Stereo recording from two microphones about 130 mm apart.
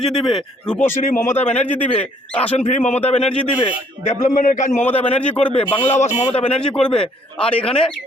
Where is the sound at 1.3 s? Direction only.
60° left (ahead or behind).